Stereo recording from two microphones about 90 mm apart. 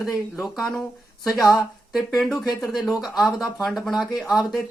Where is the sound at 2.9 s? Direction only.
45° left (ahead or behind).